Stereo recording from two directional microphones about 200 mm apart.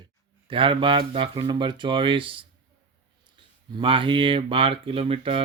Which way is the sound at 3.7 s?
25° right (ahead or behind).